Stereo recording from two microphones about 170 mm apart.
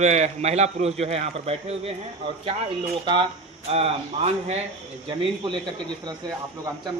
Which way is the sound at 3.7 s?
35° right (ahead or behind).